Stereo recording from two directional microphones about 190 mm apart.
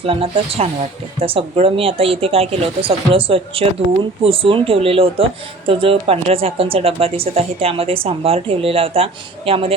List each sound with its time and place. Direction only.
0.0 s speech: 30° right (ahead or behind)